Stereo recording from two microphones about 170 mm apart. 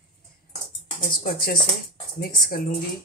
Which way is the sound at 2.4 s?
60° left (ahead or behind).